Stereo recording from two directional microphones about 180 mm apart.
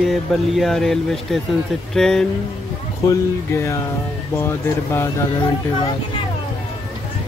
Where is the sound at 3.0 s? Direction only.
15° left (ahead or behind).